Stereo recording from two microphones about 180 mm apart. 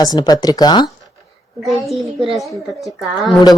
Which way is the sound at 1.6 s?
Centre (ahead or behind).